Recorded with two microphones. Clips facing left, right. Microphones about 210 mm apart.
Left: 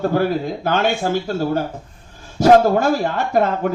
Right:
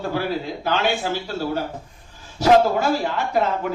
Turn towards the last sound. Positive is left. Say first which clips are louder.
# left 4 dB
turn(degrees=50)  # may be behind; listen again after turning